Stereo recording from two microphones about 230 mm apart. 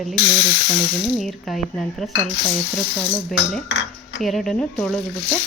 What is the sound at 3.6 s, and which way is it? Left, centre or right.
Cutlery, left.